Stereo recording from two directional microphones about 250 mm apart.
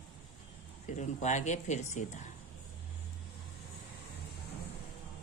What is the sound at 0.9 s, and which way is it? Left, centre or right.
Speech, left.